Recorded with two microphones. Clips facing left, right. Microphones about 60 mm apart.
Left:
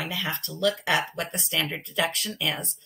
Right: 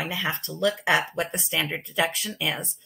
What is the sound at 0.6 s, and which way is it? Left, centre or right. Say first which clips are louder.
Speech: right 2 dB; centre.